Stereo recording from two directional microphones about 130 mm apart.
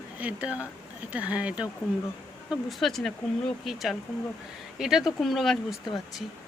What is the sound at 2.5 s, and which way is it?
Speech, centre (ahead or behind).